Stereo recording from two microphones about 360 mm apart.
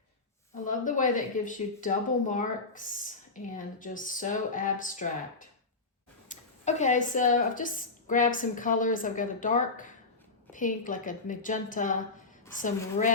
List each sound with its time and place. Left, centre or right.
0.6 s speech: left